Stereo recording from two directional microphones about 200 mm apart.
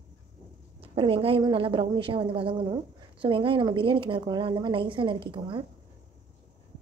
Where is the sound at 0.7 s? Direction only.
25° right (ahead or behind).